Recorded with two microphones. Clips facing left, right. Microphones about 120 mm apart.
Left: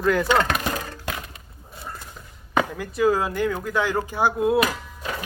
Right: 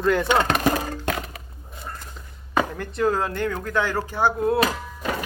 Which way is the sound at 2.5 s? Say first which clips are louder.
Even; 5° left (ahead or behind).